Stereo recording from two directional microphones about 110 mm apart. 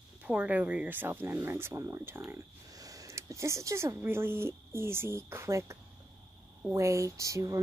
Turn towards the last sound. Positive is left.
turn(degrees=-30)  # may be behind; listen again after turning